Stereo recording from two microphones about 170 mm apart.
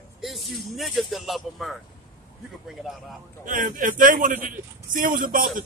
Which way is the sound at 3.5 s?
50° right (ahead or behind).